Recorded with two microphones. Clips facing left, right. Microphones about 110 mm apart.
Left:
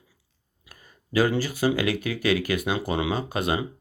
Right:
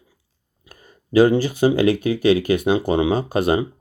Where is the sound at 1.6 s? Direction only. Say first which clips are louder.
Right 8 dB; 25° right (ahead or behind).